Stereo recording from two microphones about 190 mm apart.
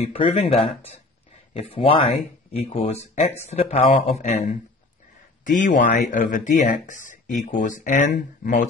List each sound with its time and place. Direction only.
0.0 s speech: 30° left (ahead or behind)